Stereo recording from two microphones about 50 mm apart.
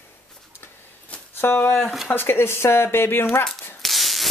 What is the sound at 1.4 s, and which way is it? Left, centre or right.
Speech, left.